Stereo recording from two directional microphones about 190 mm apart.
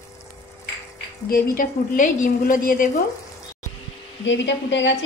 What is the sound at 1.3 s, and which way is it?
A woman's voice, 45° left (ahead or behind).